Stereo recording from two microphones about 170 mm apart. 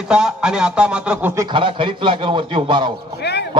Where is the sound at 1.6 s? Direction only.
30° right (ahead or behind).